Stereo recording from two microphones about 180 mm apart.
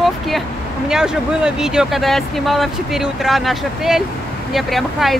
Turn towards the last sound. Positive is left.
turn(degrees=0)  # may be behind; listen again after turning